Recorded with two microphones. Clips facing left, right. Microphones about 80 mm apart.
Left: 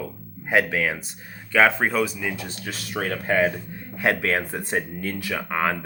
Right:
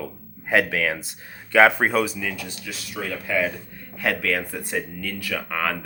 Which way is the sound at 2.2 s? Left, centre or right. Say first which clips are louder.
Left 1 dB; left.